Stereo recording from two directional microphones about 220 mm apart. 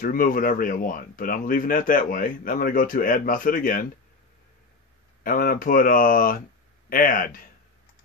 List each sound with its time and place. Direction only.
0.0 s speech: 40° left (ahead or behind)
5.2 s speech: 40° left (ahead or behind)